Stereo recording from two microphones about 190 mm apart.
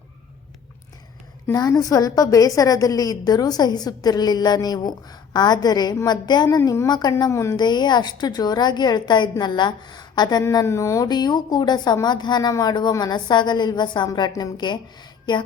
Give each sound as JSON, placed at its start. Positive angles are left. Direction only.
{"t": 1.5, "sound": "a woman's voice", "side_deg": 20}